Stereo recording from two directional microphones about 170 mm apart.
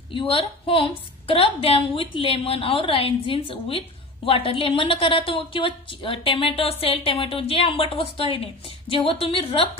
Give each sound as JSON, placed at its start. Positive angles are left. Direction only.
{"t": 0.1, "sound": "a woman's voice", "side_deg": 30}